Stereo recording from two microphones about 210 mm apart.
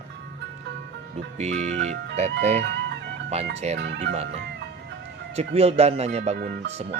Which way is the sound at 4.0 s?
30° right (ahead or behind).